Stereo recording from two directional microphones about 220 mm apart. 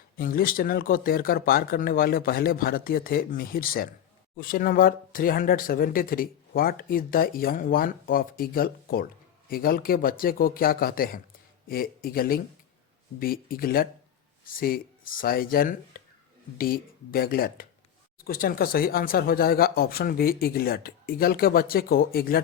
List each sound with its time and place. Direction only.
0.2 s speech: 40° left (ahead or behind)